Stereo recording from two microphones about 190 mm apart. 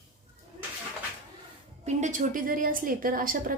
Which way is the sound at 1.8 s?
40° right (ahead or behind).